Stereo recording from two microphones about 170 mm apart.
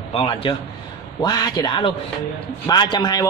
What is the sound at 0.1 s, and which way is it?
A man's voice, 30° left (ahead or behind).